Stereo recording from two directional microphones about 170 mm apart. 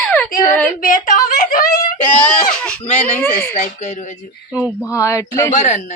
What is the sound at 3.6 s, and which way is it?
Speech, 45° left (ahead or behind).